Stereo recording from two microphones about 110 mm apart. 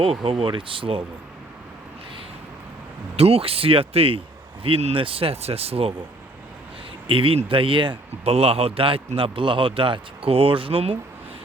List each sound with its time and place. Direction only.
0.0 s speech: 60° right (ahead or behind)
3.2 s speech: 60° right (ahead or behind)
7.1 s speech: 55° right (ahead or behind)